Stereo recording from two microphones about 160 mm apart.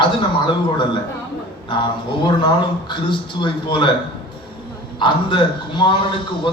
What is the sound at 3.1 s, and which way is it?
Speech, 30° left (ahead or behind).